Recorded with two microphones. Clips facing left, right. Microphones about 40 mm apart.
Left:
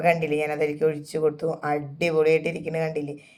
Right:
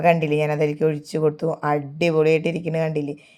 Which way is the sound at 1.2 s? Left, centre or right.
Right.